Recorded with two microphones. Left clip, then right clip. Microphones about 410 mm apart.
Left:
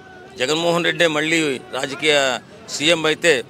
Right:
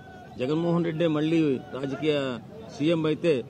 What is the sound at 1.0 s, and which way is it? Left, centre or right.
A man's voice, left.